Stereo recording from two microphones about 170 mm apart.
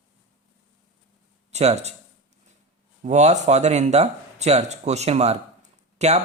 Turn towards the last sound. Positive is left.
turn(degrees=-40)  # may be behind; listen again after turning